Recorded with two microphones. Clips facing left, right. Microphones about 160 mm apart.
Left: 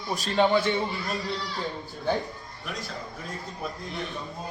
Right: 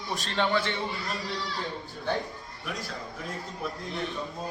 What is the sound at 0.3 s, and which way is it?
Speech, 15° left (ahead or behind).